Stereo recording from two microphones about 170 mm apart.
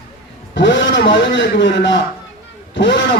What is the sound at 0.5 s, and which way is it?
A man's voice, 90° left.